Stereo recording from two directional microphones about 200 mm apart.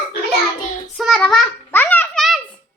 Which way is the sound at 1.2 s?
Centre (ahead or behind).